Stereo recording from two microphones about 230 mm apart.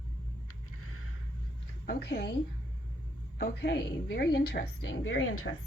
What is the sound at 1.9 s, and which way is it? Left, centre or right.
Speech, left.